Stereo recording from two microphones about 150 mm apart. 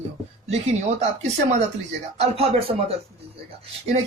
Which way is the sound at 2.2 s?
45° right (ahead or behind).